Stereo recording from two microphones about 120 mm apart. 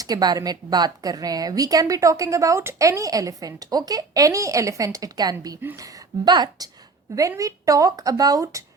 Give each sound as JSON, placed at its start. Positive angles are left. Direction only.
{"t": 0.0, "sound": "a woman's voice", "side_deg": -35}